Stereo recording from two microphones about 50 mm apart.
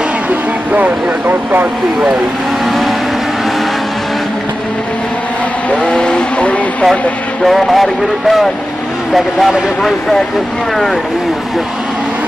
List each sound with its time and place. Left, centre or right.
0.3 s speech: right
5.8 s vehicle: centre
7.4 s speech: centre